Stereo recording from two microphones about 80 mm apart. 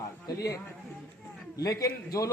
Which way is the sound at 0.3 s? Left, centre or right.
Left.